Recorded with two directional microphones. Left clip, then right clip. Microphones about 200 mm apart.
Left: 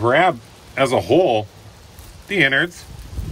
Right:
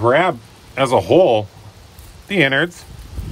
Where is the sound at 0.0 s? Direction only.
10° right (ahead or behind).